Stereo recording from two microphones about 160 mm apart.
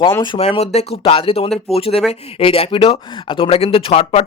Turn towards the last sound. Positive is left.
turn(degrees=40)  # may be behind; listen again after turning